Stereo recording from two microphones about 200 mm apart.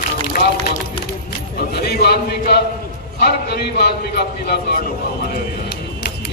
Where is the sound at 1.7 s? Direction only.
50° left (ahead or behind).